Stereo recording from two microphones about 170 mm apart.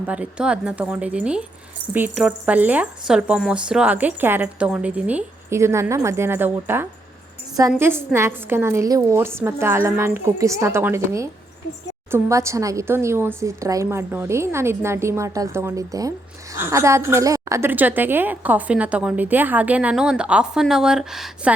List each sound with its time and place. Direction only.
0.1 s speech: 5° right (ahead or behind)